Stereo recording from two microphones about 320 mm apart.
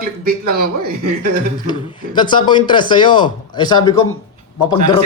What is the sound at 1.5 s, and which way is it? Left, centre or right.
A man's voice, centre.